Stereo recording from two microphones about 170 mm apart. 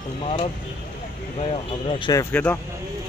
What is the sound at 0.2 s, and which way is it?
Speech, 30° left (ahead or behind).